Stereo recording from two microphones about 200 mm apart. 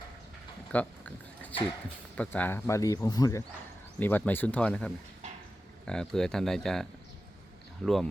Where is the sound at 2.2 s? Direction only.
10° left (ahead or behind).